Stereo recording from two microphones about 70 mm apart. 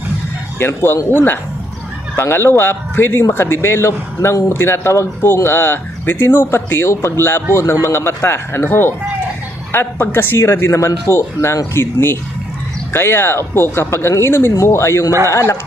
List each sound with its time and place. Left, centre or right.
0.6 s a man's voice: left